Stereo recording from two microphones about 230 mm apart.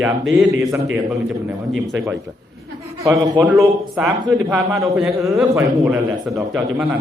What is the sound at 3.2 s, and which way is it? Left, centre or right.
A man's voice, centre.